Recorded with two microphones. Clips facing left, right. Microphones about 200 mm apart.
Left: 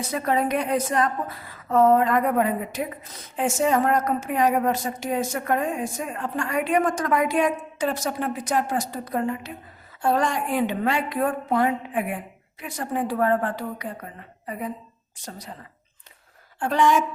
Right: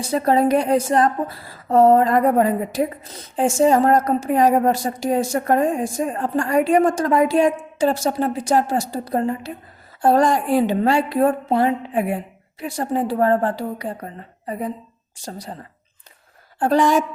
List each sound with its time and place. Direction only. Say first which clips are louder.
0.0 s a woman's voice: right 6 dB; 30° right (ahead or behind)
16.6 s a woman's voice: right 4 dB; 35° right (ahead or behind)